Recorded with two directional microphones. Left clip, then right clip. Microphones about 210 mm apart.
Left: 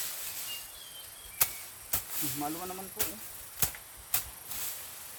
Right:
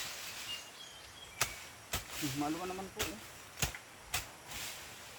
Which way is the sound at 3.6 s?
15° left (ahead or behind).